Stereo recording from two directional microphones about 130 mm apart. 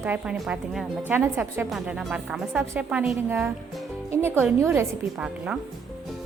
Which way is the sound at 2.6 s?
20° right (ahead or behind).